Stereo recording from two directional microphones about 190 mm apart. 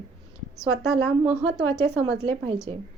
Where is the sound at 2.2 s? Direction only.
30° right (ahead or behind).